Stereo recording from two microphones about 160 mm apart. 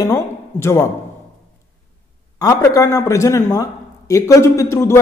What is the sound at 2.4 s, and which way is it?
A man's voice, 20° left (ahead or behind).